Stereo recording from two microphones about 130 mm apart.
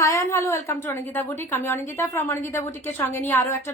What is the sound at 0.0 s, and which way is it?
A woman's voice, 25° left (ahead or behind).